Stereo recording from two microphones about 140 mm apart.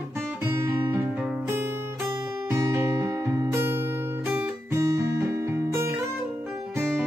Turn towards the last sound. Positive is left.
turn(degrees=-20)  # may be behind; listen again after turning